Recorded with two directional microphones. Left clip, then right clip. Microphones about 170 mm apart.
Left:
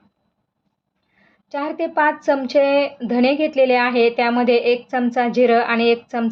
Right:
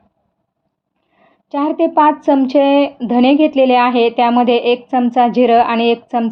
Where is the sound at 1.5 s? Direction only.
35° right (ahead or behind).